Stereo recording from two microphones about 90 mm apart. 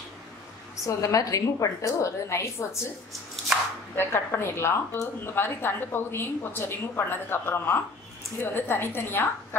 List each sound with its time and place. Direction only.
0.8 s a woman's voice: 40° left (ahead or behind)
3.9 s a woman's voice: 25° left (ahead or behind)